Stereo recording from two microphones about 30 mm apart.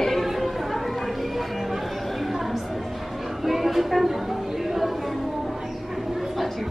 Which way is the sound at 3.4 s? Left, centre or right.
Centre.